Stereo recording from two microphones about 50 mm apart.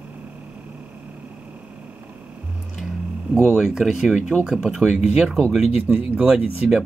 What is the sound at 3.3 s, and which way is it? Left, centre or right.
Speech, centre.